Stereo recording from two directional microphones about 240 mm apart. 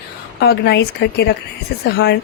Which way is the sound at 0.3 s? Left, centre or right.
Left.